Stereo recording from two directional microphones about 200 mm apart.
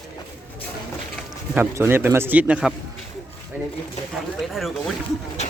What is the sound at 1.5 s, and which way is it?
Speech, 10° right (ahead or behind).